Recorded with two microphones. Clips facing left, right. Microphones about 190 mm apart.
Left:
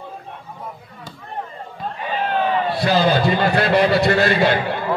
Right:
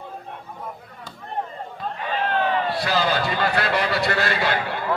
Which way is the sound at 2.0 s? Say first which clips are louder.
Left 2 dB; 10° left (ahead or behind).